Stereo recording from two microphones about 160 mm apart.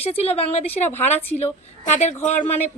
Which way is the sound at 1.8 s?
45° left (ahead or behind).